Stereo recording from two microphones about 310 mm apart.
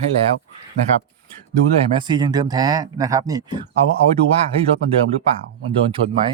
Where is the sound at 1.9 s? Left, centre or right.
Centre.